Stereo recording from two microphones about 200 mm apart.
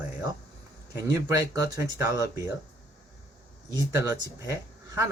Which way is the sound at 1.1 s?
15° right (ahead or behind).